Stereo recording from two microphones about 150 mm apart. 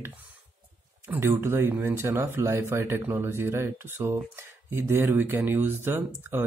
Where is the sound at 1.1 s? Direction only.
15° right (ahead or behind).